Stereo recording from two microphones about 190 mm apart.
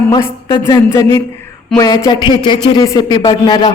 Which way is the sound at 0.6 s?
15° left (ahead or behind).